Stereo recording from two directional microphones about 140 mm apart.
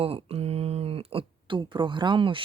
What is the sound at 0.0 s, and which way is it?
Speech, 45° right (ahead or behind).